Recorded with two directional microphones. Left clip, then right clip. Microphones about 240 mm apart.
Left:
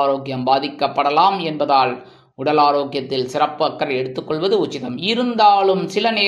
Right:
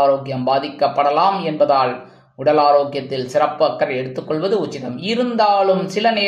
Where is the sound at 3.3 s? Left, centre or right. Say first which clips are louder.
Right 4 dB; left.